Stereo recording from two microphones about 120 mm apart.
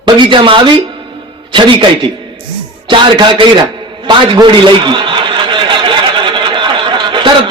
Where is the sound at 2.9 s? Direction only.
40° right (ahead or behind).